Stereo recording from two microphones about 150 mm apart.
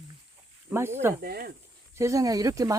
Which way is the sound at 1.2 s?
85° right.